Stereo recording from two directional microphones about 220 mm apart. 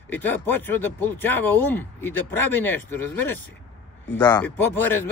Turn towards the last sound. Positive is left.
turn(degrees=10)  # may be behind; listen again after turning